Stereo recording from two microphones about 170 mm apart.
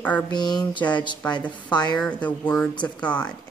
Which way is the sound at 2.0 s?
10° left (ahead or behind).